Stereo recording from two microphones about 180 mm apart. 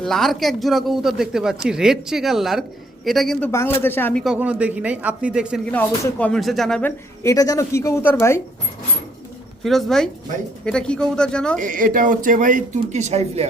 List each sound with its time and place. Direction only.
0.0 s speech: centre (ahead or behind)
3.5 s speech: 15° left (ahead or behind)
4.2 s speech: 5° right (ahead or behind)
5.7 s speech: 10° left (ahead or behind)
9.6 s speech: centre (ahead or behind)
11.6 s speech: 50° right (ahead or behind)